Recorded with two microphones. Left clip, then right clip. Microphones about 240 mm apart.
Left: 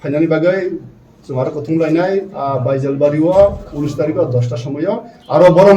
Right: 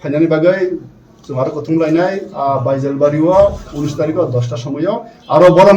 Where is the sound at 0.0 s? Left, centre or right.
Centre.